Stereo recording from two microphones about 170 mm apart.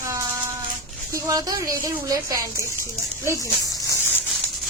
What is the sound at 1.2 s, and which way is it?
Speech, 20° right (ahead or behind).